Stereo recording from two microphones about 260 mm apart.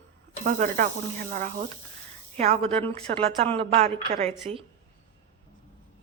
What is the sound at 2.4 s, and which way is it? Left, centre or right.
Speech, right.